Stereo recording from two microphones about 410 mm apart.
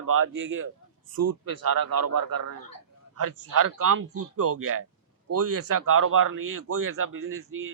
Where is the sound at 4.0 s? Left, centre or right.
Right.